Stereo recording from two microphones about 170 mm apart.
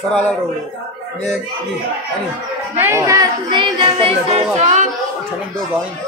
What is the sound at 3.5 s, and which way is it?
Speech, 35° right (ahead or behind).